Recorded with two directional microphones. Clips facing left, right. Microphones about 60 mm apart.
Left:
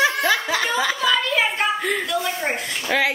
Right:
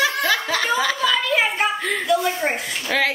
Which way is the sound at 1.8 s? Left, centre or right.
Centre.